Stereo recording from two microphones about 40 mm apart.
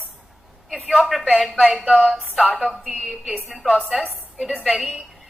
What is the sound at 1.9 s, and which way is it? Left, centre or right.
Speech, right.